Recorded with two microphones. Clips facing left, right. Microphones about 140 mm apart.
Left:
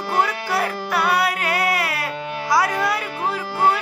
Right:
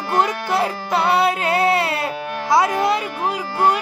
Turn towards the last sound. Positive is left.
turn(degrees=-15)  # may be behind; listen again after turning